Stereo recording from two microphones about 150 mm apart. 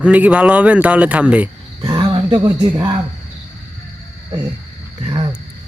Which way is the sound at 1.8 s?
25° right (ahead or behind).